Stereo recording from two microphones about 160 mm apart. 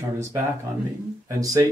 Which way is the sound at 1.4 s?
20° right (ahead or behind).